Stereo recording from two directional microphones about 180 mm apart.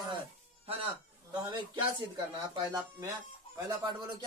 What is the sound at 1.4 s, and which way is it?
Speech, 25° right (ahead or behind).